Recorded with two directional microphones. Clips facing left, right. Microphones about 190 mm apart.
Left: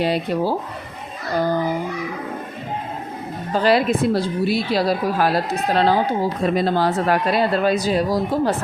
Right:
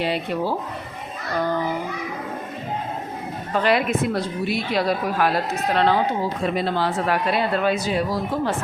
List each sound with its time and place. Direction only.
0.0 s a woman's voice: 40° left (ahead or behind)
3.5 s a woman's voice: 35° left (ahead or behind)